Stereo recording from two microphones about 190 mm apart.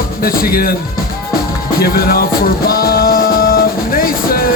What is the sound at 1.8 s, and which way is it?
Music, 50° left (ahead or behind).